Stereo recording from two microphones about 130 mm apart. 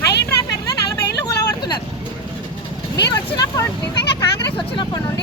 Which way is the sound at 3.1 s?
30° left (ahead or behind).